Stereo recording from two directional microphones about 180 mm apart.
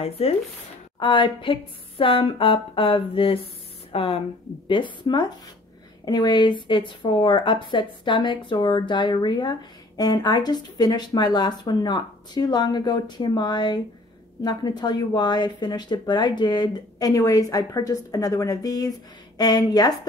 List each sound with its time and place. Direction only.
0.2 s a woman's voice: 35° left (ahead or behind)